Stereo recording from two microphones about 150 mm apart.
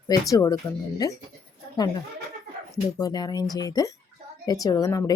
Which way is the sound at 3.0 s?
25° left (ahead or behind).